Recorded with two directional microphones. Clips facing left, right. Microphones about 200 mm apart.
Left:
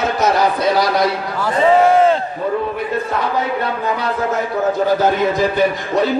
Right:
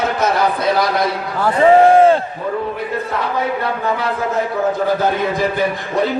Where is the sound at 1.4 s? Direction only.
55° right (ahead or behind).